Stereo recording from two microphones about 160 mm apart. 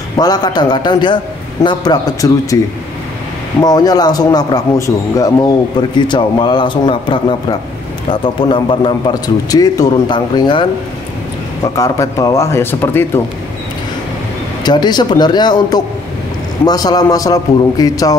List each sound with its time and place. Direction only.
0.2 s a man's voice: 25° left (ahead or behind)
3.6 s a man's voice: 25° left (ahead or behind)
14.6 s a man's voice: 25° left (ahead or behind)